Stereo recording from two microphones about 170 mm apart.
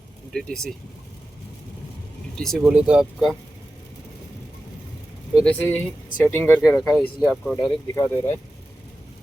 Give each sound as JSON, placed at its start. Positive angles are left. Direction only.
{"t": 0.3, "sound": "speech", "side_deg": 5}
{"t": 2.4, "sound": "speech", "side_deg": 0}
{"t": 5.4, "sound": "speech", "side_deg": 10}
{"t": 6.5, "sound": "speech", "side_deg": -5}
{"t": 7.9, "sound": "speech", "side_deg": 15}